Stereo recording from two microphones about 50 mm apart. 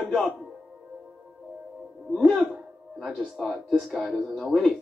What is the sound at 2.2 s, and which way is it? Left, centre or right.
Music, centre.